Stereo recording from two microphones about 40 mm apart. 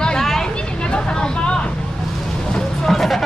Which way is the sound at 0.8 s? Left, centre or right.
Left.